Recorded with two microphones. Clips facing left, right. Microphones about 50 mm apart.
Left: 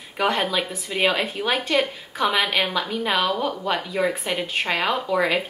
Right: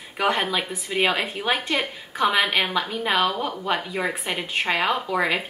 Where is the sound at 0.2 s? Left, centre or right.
Centre.